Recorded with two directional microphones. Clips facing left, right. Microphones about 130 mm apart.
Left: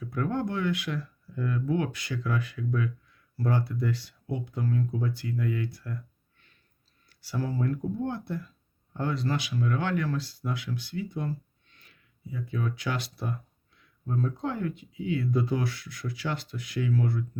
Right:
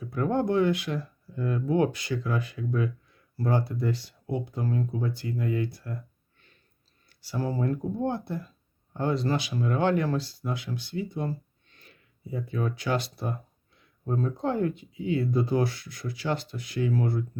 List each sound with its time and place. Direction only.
0.2 s speech: 30° right (ahead or behind)
7.2 s speech: 30° right (ahead or behind)